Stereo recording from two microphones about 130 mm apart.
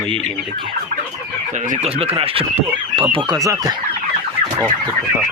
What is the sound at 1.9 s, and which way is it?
Speech, 50° right (ahead or behind).